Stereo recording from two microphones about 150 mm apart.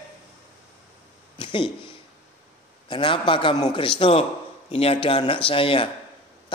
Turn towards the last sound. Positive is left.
turn(degrees=35)  # may be behind; listen again after turning